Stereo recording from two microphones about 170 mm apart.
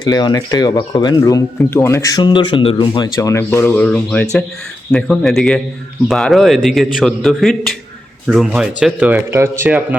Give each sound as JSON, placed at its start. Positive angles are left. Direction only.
{"t": 0.0, "sound": "a man's voice", "side_deg": 20}